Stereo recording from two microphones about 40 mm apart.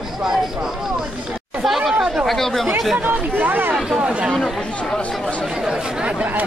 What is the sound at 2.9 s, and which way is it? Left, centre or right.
Speech, right.